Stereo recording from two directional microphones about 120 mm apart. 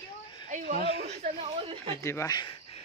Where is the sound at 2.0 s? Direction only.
20° left (ahead or behind).